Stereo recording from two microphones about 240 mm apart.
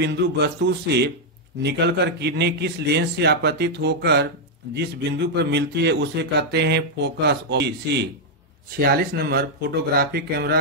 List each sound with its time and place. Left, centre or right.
0.0 s speech: right